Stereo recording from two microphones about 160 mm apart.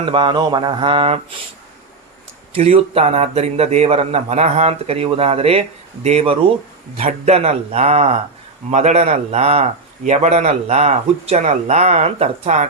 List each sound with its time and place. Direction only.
0.1 s a man's voice: 30° right (ahead or behind)
2.5 s a man's voice: 40° right (ahead or behind)
7.0 s a man's voice: 50° right (ahead or behind)
7.3 s a man's voice: 40° right (ahead or behind)